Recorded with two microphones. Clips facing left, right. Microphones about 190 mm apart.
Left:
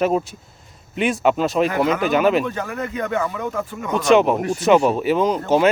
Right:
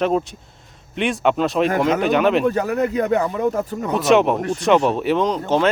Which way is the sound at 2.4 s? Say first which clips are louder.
Right 7 dB; 40° right (ahead or behind).